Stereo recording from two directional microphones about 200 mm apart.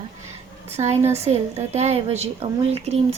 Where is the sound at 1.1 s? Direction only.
35° right (ahead or behind).